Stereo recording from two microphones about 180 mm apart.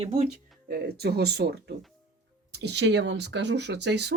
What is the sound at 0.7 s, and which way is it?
Speech, 60° right (ahead or behind).